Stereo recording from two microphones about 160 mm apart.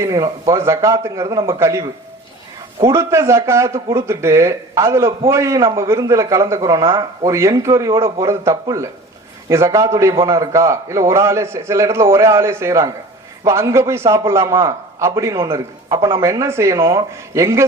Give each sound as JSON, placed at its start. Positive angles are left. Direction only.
{"t": 0.0, "sound": "a man's voice", "side_deg": -20}